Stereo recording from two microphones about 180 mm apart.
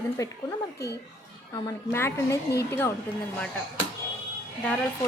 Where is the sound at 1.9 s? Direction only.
15° left (ahead or behind).